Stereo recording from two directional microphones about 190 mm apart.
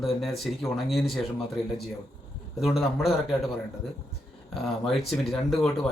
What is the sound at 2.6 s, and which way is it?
Speech, centre (ahead or behind).